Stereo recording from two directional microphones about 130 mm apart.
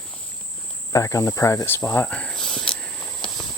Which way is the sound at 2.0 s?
10° left (ahead or behind).